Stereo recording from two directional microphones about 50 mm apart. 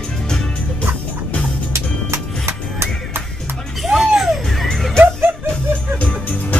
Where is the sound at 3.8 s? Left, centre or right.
Centre.